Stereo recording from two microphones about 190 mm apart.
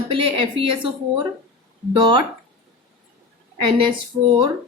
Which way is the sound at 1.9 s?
25° right (ahead or behind).